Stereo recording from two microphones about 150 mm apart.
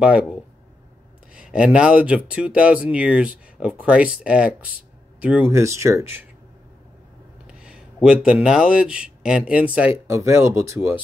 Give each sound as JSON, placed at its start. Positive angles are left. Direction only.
{"t": 0.0, "sound": "speech", "side_deg": -5}
{"t": 1.3, "sound": "speech", "side_deg": -5}
{"t": 7.4, "sound": "speech", "side_deg": -5}